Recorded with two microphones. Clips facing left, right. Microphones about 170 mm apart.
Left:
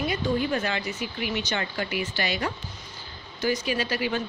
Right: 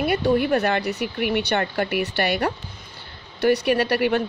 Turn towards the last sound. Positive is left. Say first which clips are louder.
# right 7 dB
turn(degrees=-65)  # may be behind; listen again after turning